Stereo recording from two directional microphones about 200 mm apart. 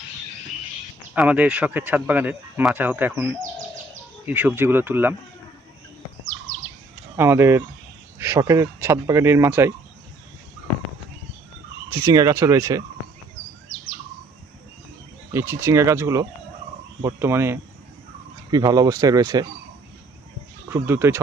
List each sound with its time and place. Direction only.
1.1 s speech: 5° right (ahead or behind)
7.2 s speech: 10° right (ahead or behind)
11.9 s speech: 15° right (ahead or behind)
15.3 s speech: 15° right (ahead or behind)
20.7 s speech: 15° right (ahead or behind)